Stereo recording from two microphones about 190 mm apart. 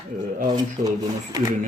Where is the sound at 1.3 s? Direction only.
20° right (ahead or behind).